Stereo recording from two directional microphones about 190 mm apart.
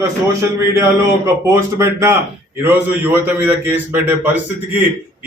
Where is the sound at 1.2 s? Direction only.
15° right (ahead or behind).